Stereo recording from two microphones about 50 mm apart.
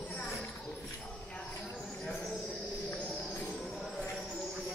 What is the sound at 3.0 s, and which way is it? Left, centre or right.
Music, centre.